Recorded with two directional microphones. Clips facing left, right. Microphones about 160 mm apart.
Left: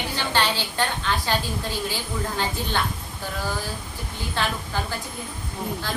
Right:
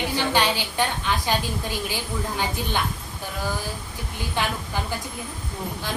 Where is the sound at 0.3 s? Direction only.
15° right (ahead or behind).